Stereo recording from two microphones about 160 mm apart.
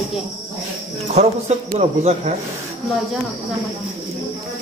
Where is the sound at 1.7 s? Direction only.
45° right (ahead or behind).